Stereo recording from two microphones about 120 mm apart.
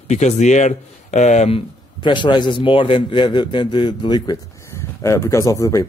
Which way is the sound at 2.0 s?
40° left (ahead or behind).